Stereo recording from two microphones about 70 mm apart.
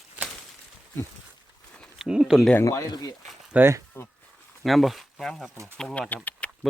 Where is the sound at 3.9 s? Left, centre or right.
Left.